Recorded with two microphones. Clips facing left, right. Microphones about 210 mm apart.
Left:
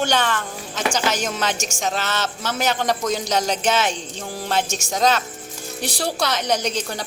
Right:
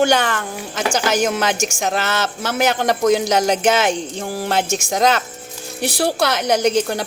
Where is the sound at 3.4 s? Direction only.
55° right (ahead or behind).